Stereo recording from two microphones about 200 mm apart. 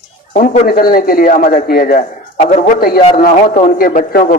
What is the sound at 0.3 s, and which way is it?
A man's voice, 40° left (ahead or behind).